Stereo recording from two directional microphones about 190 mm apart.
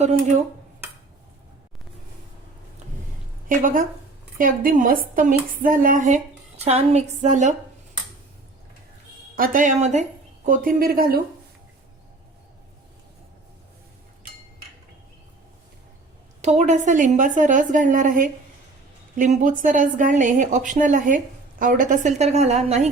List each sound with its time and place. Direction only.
3.6 s a woman's voice: 45° right (ahead or behind)
9.3 s speech: 45° right (ahead or behind)
16.4 s a woman's voice: 35° right (ahead or behind)